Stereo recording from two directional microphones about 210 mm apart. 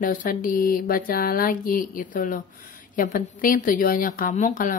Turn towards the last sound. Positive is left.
turn(degrees=40)  # may be behind; listen again after turning